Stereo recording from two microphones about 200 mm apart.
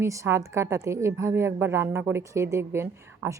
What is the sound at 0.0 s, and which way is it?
A woman's voice, 15° right (ahead or behind).